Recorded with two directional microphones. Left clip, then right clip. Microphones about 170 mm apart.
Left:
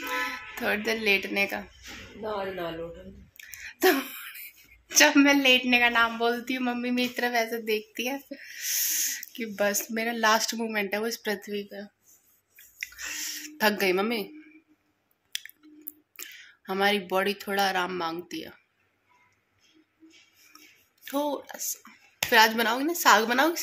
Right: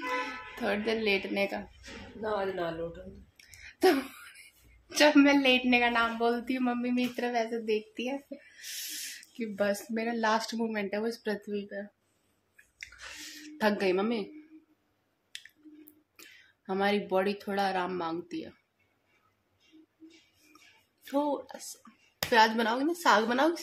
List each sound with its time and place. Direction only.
0.3 s speech: 10° left (ahead or behind)
2.2 s speech: 15° left (ahead or behind)
3.3 s a sound: 5° left (ahead or behind)
4.8 s a woman's voice: 10° left (ahead or behind)
9.2 s speech: 5° left (ahead or behind)
12.9 s a sound: centre (ahead or behind)
15.3 s squish: centre (ahead or behind)
16.2 s speech: centre (ahead or behind)
21.0 s speech: centre (ahead or behind)